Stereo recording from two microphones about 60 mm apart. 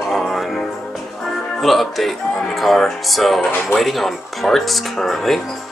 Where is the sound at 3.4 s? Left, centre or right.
Left.